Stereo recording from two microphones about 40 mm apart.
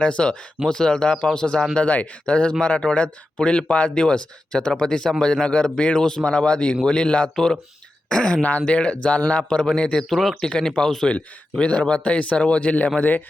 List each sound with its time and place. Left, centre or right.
0.0 s speech: left
1.7 s a man's voice: left
7.3 s speech: centre
8.1 s a man's voice: left
10.0 s speech: centre
10.4 s speech: centre
11.6 s a man's voice: left